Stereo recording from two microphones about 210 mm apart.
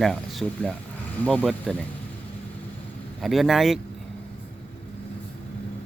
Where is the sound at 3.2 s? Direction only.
Centre (ahead or behind).